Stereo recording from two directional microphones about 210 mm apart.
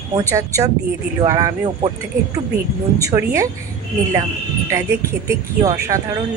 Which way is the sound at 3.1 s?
15° right (ahead or behind).